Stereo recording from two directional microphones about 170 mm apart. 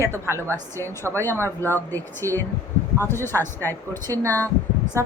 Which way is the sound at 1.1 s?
15° left (ahead or behind).